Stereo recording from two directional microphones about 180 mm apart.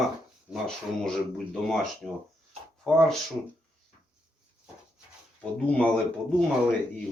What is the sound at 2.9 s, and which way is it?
Speech, centre (ahead or behind).